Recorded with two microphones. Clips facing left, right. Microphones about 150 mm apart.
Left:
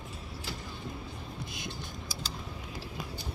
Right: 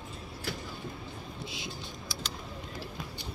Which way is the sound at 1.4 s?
50° left (ahead or behind).